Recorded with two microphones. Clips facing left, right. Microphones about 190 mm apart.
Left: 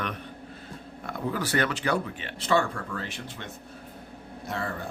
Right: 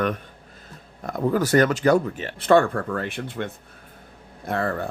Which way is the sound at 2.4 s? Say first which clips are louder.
Right 8 dB; 55° right (ahead or behind).